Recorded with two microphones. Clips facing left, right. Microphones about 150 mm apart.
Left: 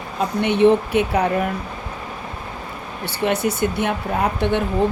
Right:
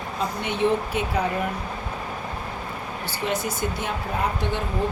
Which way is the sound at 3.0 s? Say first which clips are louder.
Left 7 dB; 65° left (ahead or behind).